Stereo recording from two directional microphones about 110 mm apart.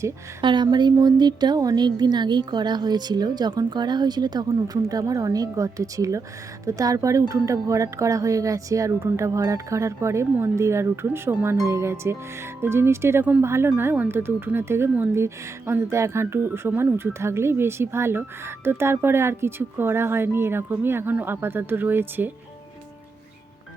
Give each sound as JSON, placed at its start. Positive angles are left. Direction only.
{"t": 0.4, "sound": "speech", "side_deg": -45}